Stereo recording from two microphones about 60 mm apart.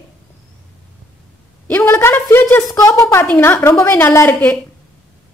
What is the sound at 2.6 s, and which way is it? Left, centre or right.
Speech, left.